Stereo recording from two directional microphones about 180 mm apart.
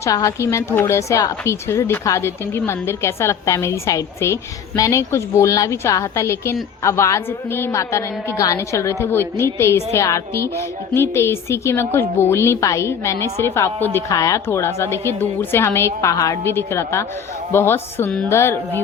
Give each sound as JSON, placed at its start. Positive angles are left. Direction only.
{"t": 0.0, "sound": "a woman's voice", "side_deg": 20}